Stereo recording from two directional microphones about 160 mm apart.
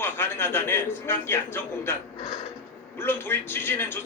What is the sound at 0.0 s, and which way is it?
A man's voice, 15° left (ahead or behind).